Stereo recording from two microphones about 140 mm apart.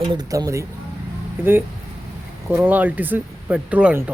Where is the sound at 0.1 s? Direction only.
25° right (ahead or behind).